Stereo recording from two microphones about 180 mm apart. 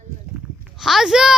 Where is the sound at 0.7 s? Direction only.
Centre (ahead or behind).